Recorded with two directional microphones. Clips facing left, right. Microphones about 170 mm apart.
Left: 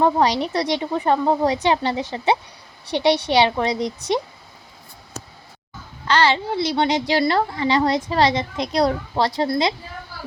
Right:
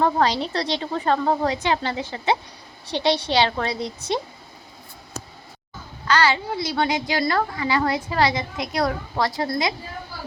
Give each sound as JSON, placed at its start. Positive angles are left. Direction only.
{"t": 0.0, "sound": "a woman's voice", "side_deg": 15}
{"t": 6.1, "sound": "a woman's voice", "side_deg": 30}